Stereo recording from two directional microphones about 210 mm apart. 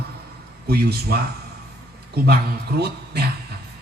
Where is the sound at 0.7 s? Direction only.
50° right (ahead or behind).